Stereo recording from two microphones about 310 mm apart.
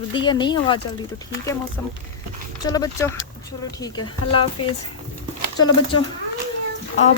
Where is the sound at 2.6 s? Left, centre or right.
Centre.